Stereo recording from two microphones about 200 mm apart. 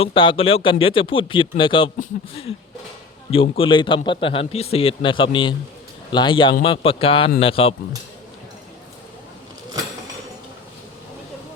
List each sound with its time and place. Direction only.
0.0 s a man's voice: 25° left (ahead or behind)
3.6 s a man's voice: 25° left (ahead or behind)